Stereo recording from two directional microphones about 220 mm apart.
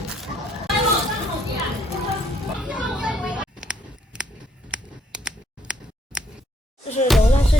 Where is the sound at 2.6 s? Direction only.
5° right (ahead or behind).